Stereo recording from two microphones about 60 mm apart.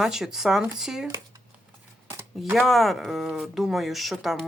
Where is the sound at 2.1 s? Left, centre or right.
Right.